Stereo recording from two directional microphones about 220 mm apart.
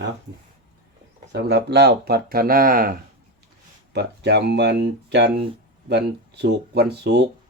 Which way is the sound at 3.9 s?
50° right (ahead or behind).